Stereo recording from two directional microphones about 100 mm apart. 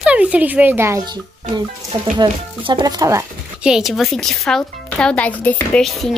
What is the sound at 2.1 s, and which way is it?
Speech, 55° right (ahead or behind).